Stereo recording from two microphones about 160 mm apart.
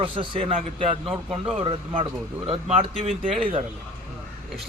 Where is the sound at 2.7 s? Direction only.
45° right (ahead or behind).